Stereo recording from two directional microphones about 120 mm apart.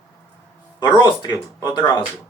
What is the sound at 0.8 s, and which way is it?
Speech, 40° left (ahead or behind).